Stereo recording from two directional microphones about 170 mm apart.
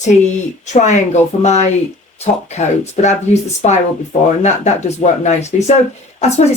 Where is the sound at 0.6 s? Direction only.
45° left (ahead or behind).